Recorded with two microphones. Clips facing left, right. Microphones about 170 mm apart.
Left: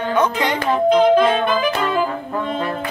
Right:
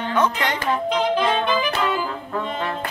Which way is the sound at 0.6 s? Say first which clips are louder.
Left 9 dB; 50° left (ahead or behind).